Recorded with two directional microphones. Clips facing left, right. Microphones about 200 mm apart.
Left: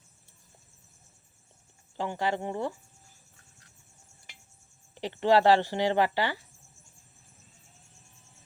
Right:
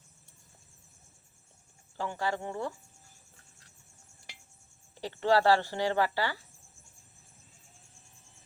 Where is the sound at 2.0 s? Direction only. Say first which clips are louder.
Left 3 dB; 20° left (ahead or behind).